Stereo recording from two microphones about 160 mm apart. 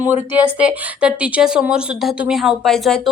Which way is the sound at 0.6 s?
5° right (ahead or behind).